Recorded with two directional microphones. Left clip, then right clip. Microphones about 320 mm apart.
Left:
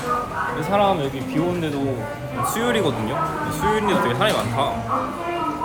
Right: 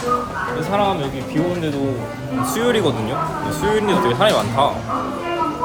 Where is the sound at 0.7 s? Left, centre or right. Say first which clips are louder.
Even; centre.